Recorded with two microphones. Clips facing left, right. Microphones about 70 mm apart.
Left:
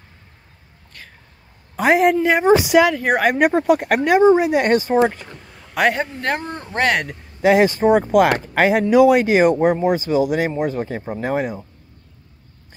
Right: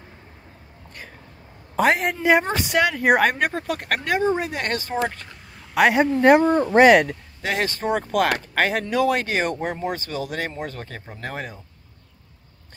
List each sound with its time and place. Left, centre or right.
1.8 s speech: centre
3.3 s speech: centre
5.5 s a man's voice: centre
6.2 s speech: centre
6.8 s speech: centre
7.4 s speech: centre